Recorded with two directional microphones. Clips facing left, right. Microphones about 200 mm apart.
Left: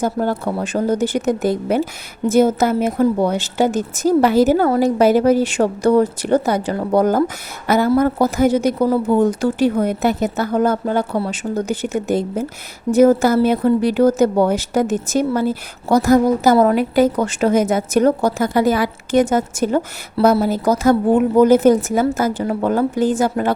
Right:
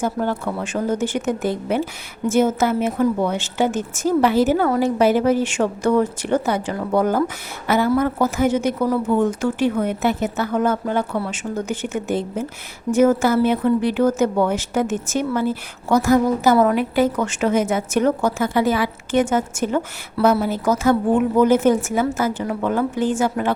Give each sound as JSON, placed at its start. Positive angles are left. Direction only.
{"t": 0.0, "sound": "a woman's voice", "side_deg": 40}